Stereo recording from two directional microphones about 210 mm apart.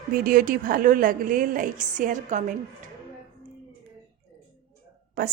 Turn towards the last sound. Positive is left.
turn(degrees=-45)  # may be behind; listen again after turning